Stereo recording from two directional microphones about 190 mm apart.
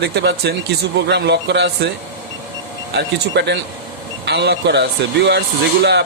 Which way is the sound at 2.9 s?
65° right (ahead or behind).